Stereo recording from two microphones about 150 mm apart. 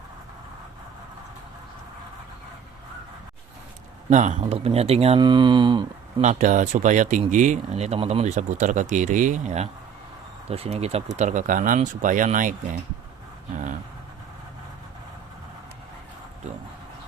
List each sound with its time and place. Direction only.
4.1 s speech: 55° right (ahead or behind)
5.2 s mantra: 30° right (ahead or behind)
6.2 s speech: 55° right (ahead or behind)
11.2 s speech: 55° right (ahead or behind)